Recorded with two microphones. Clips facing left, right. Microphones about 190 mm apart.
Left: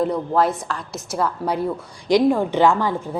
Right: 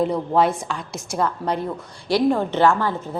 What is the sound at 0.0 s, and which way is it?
A woman's voice, centre (ahead or behind).